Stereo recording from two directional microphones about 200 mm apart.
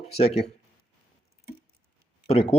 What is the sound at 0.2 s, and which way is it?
Speech, 30° left (ahead or behind).